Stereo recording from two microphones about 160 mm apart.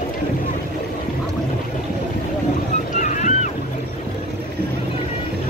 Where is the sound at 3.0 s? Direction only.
50° left (ahead or behind).